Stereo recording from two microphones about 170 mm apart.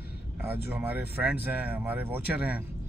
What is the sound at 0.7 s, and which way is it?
Speech, 10° right (ahead or behind).